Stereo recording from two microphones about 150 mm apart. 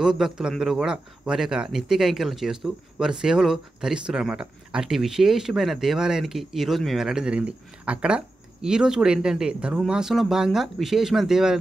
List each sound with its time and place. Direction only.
0.0 s speech: 5° right (ahead or behind)